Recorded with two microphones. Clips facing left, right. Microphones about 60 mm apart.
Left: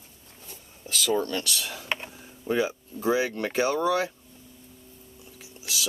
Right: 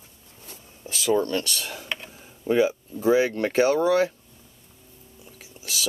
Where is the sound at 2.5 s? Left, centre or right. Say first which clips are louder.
Right 5 dB; right.